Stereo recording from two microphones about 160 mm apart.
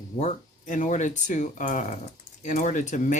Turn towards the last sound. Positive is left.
turn(degrees=50)  # may be behind; listen again after turning